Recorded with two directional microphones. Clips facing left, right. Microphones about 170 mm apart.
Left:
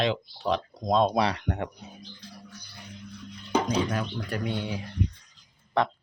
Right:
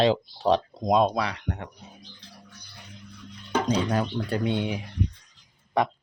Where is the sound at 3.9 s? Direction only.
35° right (ahead or behind).